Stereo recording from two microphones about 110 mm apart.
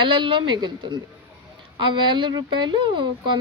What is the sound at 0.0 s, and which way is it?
Speech, 50° right (ahead or behind).